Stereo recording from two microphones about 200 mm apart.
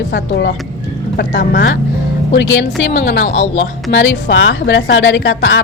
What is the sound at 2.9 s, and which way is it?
Speech, 45° left (ahead or behind).